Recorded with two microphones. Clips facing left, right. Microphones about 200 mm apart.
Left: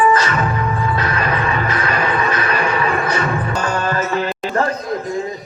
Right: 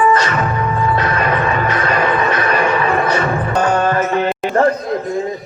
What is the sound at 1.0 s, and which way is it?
Vehicle, 35° right (ahead or behind).